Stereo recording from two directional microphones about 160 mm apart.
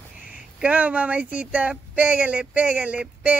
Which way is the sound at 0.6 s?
10° right (ahead or behind).